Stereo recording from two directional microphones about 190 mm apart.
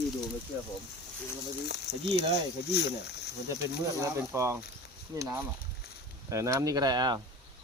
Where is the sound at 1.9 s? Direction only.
35° left (ahead or behind).